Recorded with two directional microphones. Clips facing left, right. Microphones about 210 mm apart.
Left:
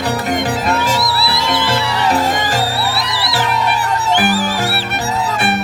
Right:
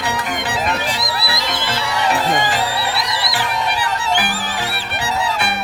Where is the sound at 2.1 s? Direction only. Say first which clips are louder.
Left 1 dB; 45° left (ahead or behind).